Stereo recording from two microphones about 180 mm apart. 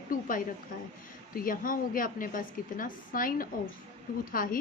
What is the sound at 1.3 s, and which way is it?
A woman's voice, 50° left (ahead or behind).